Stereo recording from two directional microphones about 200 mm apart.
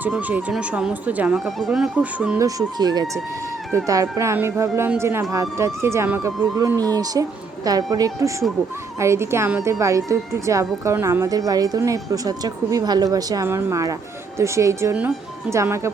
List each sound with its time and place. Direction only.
0.0 s speech: 10° right (ahead or behind)
2.4 s speech: 20° right (ahead or behind)